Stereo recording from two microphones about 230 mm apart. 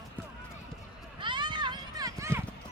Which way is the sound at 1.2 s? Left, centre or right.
Right.